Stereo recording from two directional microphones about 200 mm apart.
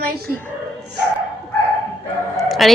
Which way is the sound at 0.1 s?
50° right (ahead or behind).